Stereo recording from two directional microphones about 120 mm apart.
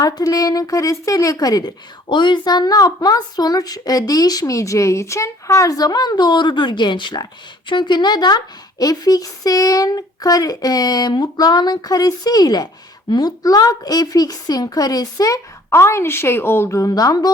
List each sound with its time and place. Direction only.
0.0 s a woman's voice: 30° left (ahead or behind)